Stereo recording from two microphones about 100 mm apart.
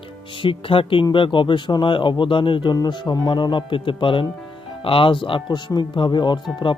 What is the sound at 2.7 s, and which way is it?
Speech, 45° left (ahead or behind).